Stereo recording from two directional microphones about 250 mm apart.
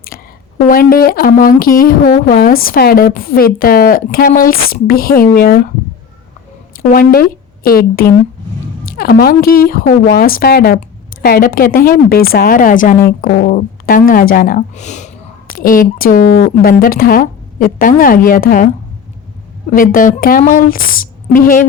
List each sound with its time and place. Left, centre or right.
0.7 s a woman's voice: left
6.9 s a woman's voice: left
19.7 s a woman's voice: left